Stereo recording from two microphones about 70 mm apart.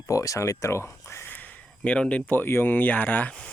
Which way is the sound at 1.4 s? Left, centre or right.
Centre.